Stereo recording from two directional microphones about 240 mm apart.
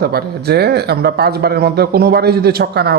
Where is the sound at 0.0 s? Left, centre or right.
Right.